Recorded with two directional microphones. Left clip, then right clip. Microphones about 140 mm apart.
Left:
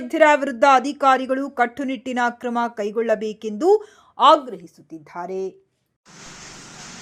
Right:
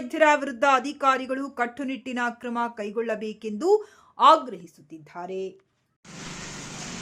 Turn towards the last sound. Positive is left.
turn(degrees=15)  # may be behind; listen again after turning